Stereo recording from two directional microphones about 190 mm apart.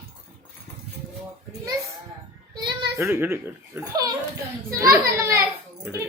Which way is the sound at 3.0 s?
15° right (ahead or behind).